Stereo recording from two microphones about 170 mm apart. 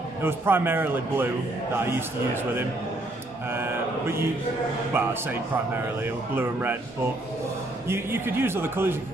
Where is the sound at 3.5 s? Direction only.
15° right (ahead or behind).